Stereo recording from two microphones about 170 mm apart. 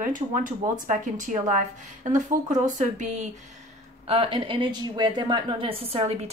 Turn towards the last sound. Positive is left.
turn(degrees=-35)  # may be behind; listen again after turning